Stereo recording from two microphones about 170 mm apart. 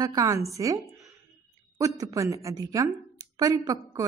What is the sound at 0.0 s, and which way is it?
Speech, 20° right (ahead or behind).